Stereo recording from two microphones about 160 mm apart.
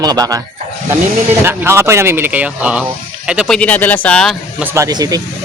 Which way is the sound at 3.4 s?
5° left (ahead or behind).